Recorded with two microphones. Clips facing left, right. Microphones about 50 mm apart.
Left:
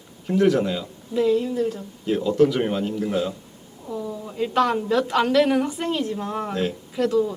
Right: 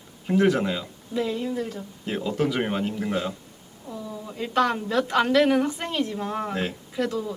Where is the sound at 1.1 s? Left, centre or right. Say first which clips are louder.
Left 6 dB; centre.